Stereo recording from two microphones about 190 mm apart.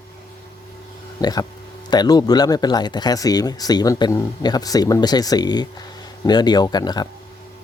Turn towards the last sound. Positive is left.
turn(degrees=20)  # may be behind; listen again after turning